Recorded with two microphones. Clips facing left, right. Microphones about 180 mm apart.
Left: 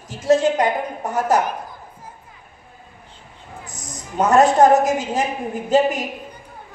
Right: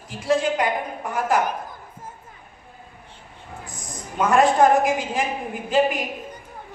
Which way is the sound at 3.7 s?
40° left (ahead or behind).